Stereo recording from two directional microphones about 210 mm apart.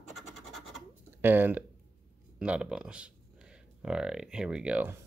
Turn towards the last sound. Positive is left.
turn(degrees=-10)  # may be behind; listen again after turning